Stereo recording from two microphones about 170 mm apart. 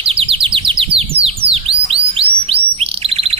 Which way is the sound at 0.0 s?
35° right (ahead or behind).